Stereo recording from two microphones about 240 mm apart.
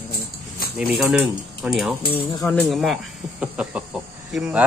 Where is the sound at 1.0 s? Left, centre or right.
Centre.